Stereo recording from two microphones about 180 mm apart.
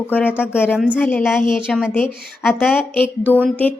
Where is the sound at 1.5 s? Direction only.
5° right (ahead or behind).